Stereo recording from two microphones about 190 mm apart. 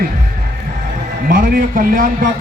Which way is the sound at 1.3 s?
45° right (ahead or behind).